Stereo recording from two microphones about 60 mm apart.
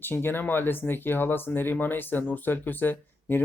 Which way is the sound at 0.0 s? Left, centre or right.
Left.